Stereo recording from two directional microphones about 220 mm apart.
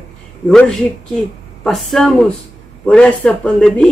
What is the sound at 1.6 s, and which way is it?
Speech, centre (ahead or behind).